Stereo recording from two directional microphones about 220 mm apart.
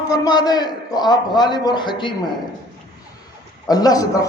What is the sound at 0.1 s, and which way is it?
A man's voice, 20° left (ahead or behind).